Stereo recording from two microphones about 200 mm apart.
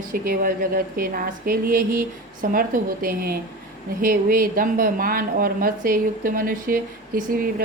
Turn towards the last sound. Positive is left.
turn(degrees=-45)  # may be behind; listen again after turning